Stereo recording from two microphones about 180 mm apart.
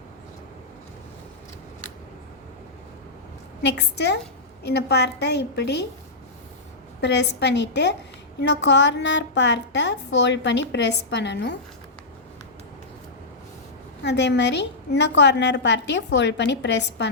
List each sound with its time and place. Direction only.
3.6 s a woman's voice: 70° left (ahead or behind)
7.0 s a woman's voice: 70° left (ahead or behind)
14.0 s a woman's voice: 70° left (ahead or behind)